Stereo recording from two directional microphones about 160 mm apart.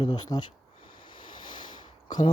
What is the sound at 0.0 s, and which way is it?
Speech, 25° left (ahead or behind).